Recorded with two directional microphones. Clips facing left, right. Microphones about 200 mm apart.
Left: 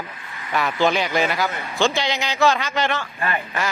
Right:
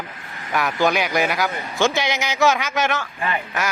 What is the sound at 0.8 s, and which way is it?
Speech, 15° right (ahead or behind).